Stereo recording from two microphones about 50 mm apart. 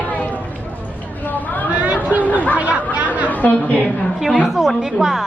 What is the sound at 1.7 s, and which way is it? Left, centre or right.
Chatter, right.